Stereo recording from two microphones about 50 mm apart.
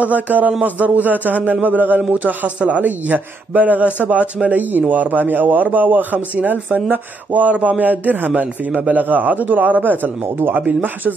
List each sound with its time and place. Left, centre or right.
0.0 s a man's voice: right
7.8 s a man's voice: right